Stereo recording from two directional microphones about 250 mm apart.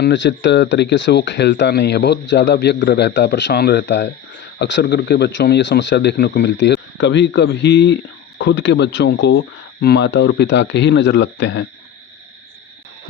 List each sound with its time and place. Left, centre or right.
0.0 s speech: left